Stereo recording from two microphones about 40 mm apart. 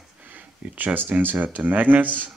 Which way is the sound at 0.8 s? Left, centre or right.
Right.